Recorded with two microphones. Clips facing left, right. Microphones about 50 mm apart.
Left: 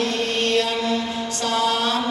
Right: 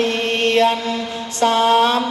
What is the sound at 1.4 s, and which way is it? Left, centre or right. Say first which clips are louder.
Mantra: right 8 dB; right.